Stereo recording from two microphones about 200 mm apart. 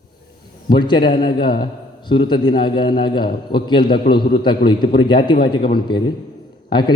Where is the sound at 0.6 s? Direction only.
20° left (ahead or behind).